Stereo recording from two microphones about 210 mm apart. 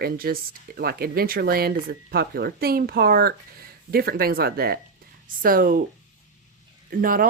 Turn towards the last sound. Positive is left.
turn(degrees=-40)  # may be behind; listen again after turning